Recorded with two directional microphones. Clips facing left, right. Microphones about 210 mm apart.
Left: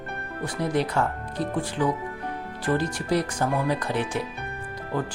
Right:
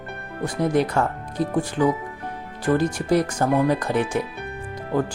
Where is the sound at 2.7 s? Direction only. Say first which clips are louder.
Right 5 dB; 50° right (ahead or behind).